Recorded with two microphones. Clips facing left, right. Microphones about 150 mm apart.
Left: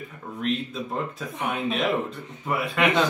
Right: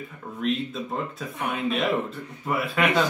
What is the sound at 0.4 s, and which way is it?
Speech, centre (ahead or behind).